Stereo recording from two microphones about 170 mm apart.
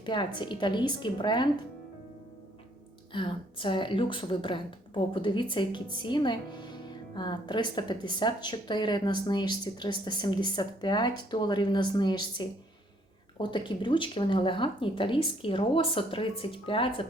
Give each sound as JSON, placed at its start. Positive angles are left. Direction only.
{"t": 0.0, "sound": "a woman's voice", "side_deg": 25}
{"t": 3.1, "sound": "a woman's voice", "side_deg": 30}